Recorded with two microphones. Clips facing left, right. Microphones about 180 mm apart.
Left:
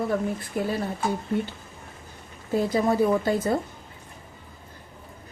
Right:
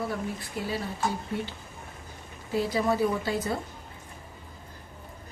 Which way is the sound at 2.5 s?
50° left (ahead or behind).